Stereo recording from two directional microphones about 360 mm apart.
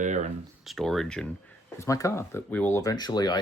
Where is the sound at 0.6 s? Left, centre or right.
Centre.